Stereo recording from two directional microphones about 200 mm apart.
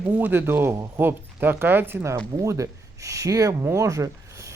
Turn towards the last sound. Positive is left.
turn(degrees=-15)  # may be behind; listen again after turning